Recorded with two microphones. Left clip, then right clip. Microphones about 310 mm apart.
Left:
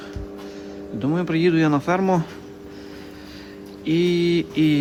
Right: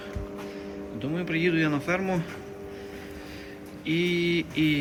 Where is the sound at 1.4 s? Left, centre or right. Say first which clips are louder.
Left 6 dB; centre.